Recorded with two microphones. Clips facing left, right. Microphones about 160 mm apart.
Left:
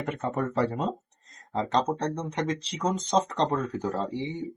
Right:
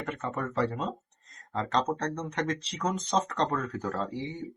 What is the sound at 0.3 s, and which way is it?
Speech, 30° left (ahead or behind).